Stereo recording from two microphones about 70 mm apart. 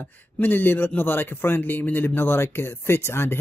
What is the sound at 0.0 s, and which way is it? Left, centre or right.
Speech, left.